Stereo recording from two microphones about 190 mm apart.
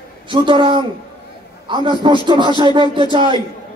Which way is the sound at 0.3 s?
25° right (ahead or behind).